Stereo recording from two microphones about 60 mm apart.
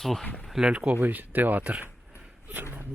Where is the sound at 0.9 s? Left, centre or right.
Right.